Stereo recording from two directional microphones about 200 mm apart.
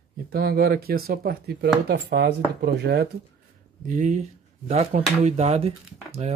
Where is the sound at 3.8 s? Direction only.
40° right (ahead or behind).